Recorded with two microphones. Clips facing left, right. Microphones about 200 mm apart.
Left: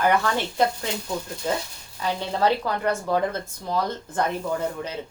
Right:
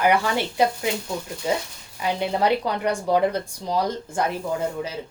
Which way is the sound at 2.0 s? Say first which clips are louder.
Right 1 dB; 15° right (ahead or behind).